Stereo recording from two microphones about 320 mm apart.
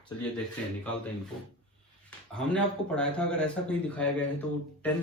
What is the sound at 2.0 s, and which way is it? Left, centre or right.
Speech, centre.